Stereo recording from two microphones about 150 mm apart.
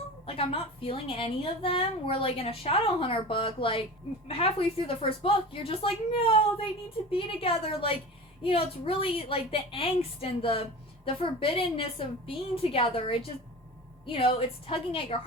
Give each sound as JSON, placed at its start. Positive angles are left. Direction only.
{"t": 0.3, "sound": "a woman's voice", "side_deg": 40}